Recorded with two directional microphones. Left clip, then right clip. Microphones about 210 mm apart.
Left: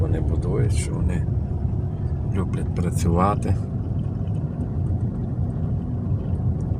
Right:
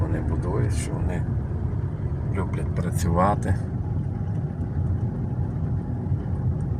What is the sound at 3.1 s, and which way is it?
Speech, 10° left (ahead or behind).